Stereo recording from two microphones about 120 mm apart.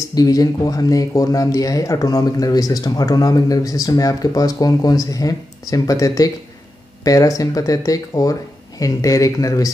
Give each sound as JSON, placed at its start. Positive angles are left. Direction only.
{"t": 0.1, "sound": "speech", "side_deg": 30}